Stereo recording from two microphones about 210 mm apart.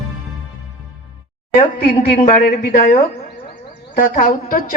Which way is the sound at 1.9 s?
30° left (ahead or behind).